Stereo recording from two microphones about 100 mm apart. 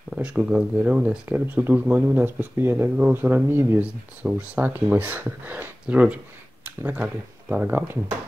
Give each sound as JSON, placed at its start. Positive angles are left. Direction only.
{"t": 0.1, "sound": "speech", "side_deg": -10}